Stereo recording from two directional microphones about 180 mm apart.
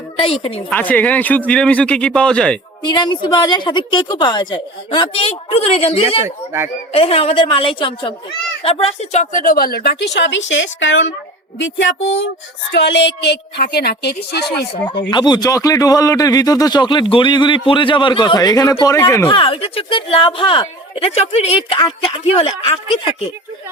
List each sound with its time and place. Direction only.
0.2 s speech: 30° left (ahead or behind)
0.7 s a man's voice: 10° left (ahead or behind)
2.8 s a man's voice: 25° left (ahead or behind)
6.2 s speech: 15° right (ahead or behind)
6.9 s a woman's voice: 30° left (ahead or behind); by 11.9 s 90° left
12.7 s a woman's voice: 75° left (ahead or behind)
15.1 s a man's voice: 25° left (ahead or behind)
19.3 s a man's voice: 30° left (ahead or behind)